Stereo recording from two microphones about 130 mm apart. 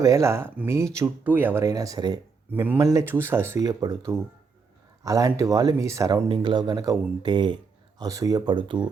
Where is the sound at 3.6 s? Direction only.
30° right (ahead or behind).